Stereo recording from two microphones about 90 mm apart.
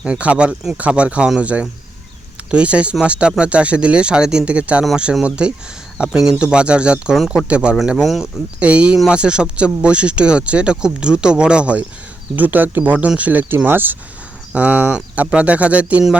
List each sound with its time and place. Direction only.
0.0 s speech: 15° right (ahead or behind)
8.5 s speech: 15° right (ahead or behind)